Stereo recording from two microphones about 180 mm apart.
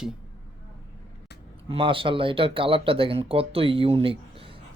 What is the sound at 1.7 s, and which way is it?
Speech, 30° right (ahead or behind).